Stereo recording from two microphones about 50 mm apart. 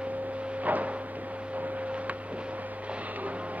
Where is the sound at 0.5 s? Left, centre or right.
Right.